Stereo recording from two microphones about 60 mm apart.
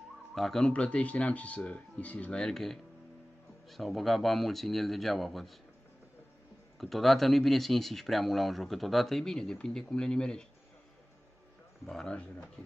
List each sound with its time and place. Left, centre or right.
0.3 s speech: centre
0.7 s speech: centre
2.4 s speech: centre
6.8 s speech: centre